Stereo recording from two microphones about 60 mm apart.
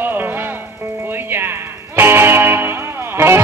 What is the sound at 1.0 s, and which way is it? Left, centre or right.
Music, right.